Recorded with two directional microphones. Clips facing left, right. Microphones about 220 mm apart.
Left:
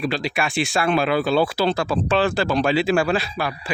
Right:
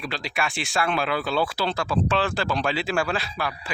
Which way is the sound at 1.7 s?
35° left (ahead or behind).